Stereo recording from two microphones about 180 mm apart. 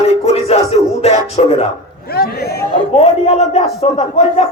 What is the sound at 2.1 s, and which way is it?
Speech, 60° left (ahead or behind).